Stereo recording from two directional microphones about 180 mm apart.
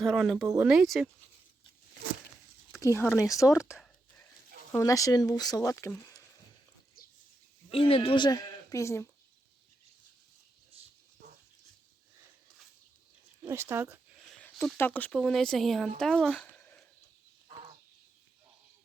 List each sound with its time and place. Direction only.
0.0 s speech: centre (ahead or behind)
0.4 s speech: 20° right (ahead or behind)
0.7 s speech: centre (ahead or behind)
2.8 s speech: 15° left (ahead or behind)
4.7 s speech: 20° left (ahead or behind)
7.7 s speech: 30° left (ahead or behind); by 9.0 s 15° left (ahead or behind)
13.4 s speech: 15° right (ahead or behind)
14.3 s a sound: 5° left (ahead or behind)
14.8 s speech: 10° left (ahead or behind)